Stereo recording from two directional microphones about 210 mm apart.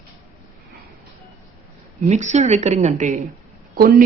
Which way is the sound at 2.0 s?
35° right (ahead or behind).